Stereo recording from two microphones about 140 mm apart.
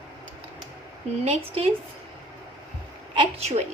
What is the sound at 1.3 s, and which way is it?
Speech, 45° right (ahead or behind).